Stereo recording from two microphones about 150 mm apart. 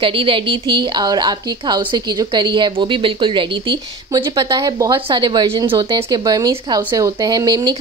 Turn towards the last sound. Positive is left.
turn(degrees=-25)  # may be behind; listen again after turning